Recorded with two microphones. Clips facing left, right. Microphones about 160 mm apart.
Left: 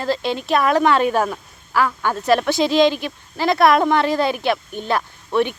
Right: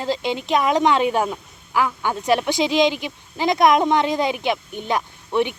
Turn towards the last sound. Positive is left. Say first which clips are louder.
# left 2 dB
turn(degrees=-15)  # may be behind; listen again after turning